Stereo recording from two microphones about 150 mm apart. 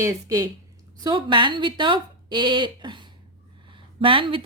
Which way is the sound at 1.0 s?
30° right (ahead or behind).